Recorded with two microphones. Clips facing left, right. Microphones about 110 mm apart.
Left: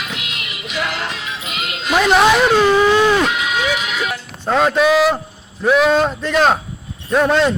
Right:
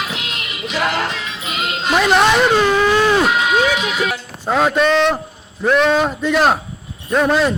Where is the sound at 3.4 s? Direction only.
40° right (ahead or behind).